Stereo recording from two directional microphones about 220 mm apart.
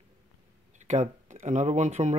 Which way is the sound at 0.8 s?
35° right (ahead or behind).